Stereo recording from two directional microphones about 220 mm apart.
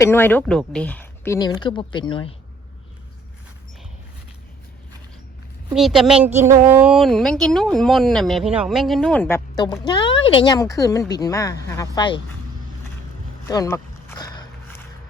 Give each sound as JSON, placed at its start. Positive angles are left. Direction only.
{"t": 0.0, "sound": "speech", "side_deg": 10}
{"t": 5.7, "sound": "speech", "side_deg": 0}
{"t": 13.5, "sound": "a sound", "side_deg": 15}